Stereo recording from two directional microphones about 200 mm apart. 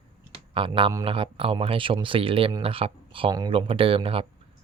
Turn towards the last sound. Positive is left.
turn(degrees=-25)  # may be behind; listen again after turning